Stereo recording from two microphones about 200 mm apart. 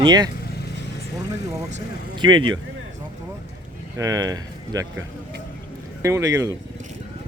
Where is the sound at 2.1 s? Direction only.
25° right (ahead or behind).